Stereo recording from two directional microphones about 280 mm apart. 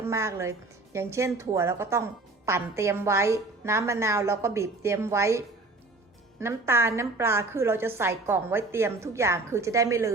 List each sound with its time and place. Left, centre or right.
0.0 s a woman's voice: centre
6.4 s a woman's voice: centre